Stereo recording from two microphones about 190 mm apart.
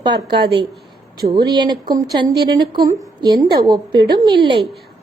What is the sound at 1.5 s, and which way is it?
A woman's voice, 20° right (ahead or behind).